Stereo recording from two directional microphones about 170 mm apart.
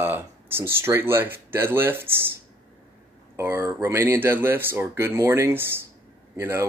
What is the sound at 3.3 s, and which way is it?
Speech, 15° right (ahead or behind).